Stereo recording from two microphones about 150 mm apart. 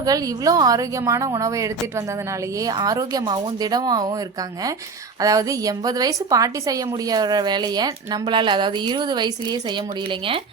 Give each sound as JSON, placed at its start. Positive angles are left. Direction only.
{"t": 0.0, "sound": "a woman's voice", "side_deg": -25}
{"t": 5.2, "sound": "a woman's voice", "side_deg": -25}